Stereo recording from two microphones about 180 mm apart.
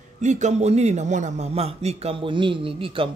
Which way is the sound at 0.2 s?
40° right (ahead or behind).